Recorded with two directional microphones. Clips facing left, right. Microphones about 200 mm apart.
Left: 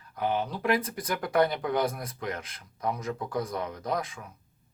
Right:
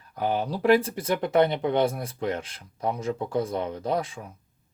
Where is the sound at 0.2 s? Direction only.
35° right (ahead or behind).